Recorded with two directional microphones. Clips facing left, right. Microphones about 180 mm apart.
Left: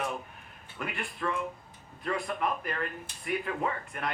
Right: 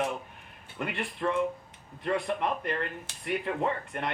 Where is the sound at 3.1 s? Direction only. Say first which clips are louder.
Right 1 dB; 90° right.